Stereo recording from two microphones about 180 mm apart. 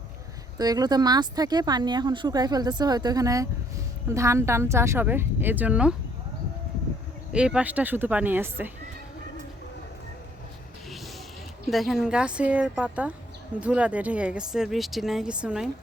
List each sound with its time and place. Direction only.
0.6 s speech: 20° right (ahead or behind)
7.3 s speech: 5° right (ahead or behind)
11.7 s speech: centre (ahead or behind)